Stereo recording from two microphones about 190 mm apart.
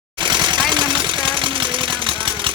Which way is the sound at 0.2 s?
25° right (ahead or behind).